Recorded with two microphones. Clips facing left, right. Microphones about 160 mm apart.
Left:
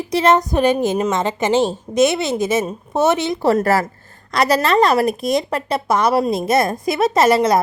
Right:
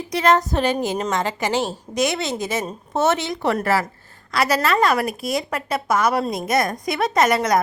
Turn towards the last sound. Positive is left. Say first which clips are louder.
# left 4 dB
turn(degrees=25)  # may be behind; listen again after turning